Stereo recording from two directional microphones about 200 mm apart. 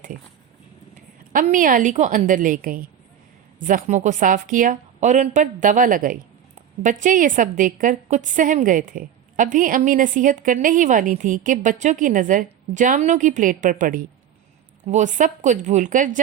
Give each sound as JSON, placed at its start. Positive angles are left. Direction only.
{"t": 1.3, "sound": "a woman's voice", "side_deg": -40}